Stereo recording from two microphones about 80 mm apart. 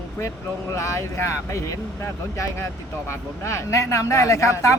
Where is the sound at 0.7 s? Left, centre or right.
Left.